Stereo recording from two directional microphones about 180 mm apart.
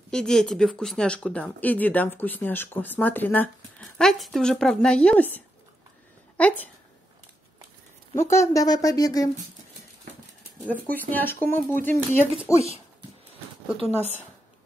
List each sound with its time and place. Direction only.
0.1 s speech: 5° left (ahead or behind)
8.1 s a woman's voice: 15° left (ahead or behind)
10.7 s speech: 10° left (ahead or behind)